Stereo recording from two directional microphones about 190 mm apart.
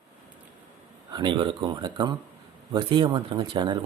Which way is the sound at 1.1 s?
25° right (ahead or behind).